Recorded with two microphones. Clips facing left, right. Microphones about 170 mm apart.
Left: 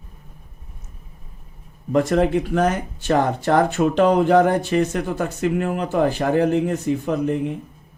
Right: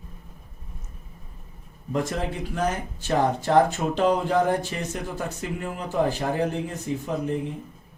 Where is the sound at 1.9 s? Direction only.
65° left (ahead or behind).